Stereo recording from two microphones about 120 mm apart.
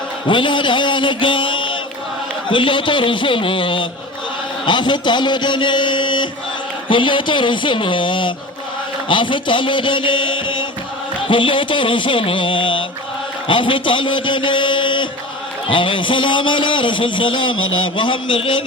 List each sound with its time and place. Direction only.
0.3 s a man's voice: 45° left (ahead or behind)
9.0 s music: 40° left (ahead or behind)
11.3 s a man's voice: 45° left (ahead or behind)